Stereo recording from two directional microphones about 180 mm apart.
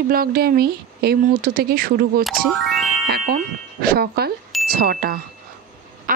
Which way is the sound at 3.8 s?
55° right (ahead or behind).